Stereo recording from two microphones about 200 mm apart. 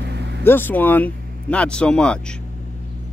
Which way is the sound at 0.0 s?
55° right (ahead or behind).